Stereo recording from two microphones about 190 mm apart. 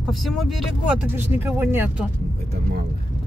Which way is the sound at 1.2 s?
10° right (ahead or behind).